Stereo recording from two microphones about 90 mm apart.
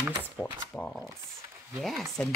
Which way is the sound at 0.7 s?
20° left (ahead or behind).